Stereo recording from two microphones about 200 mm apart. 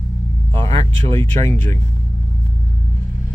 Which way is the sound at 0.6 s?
30° right (ahead or behind).